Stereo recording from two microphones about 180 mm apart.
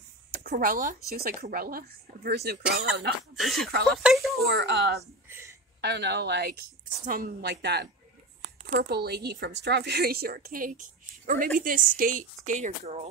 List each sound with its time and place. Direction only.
0.4 s a woman's voice: 55° right (ahead or behind)
3.3 s speech: centre (ahead or behind)
4.4 s a woman's voice: 65° right (ahead or behind)
5.3 s a sound: 15° right (ahead or behind)
5.8 s speech: 70° right (ahead or behind)
7.1 s a woman's voice: 50° right (ahead or behind)